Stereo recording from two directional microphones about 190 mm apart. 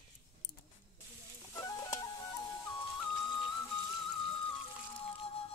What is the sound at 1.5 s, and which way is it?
Stir, 15° left (ahead or behind).